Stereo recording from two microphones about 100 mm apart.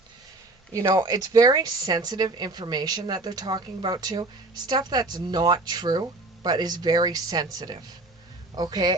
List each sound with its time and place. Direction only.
0.7 s speech: 35° right (ahead or behind)
8.5 s speech: 40° right (ahead or behind)